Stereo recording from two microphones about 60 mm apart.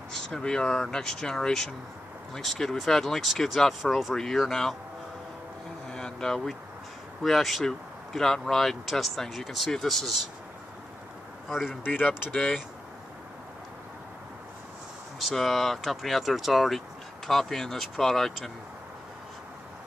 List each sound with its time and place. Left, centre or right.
0.1 s speech: centre
5.9 s vehicle: centre
7.2 s speech: centre
11.4 s a man's voice: centre
11.8 s speech: left
12.3 s speech: centre
15.1 s speech: centre